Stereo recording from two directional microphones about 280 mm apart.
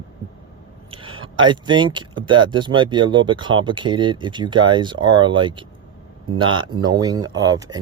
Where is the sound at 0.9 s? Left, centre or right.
Centre.